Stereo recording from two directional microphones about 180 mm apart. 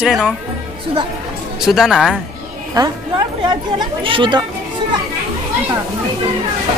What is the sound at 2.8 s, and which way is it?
Speech, 25° right (ahead or behind).